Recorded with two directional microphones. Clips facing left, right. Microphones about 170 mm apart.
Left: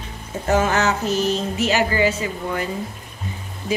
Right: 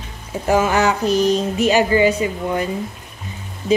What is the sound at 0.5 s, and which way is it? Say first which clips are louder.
A woman's voice: right 3 dB; 10° right (ahead or behind).